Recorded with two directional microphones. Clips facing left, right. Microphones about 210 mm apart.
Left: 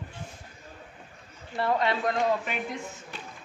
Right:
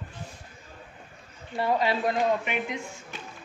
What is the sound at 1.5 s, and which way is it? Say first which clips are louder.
Speech: right 1 dB; centre (ahead or behind).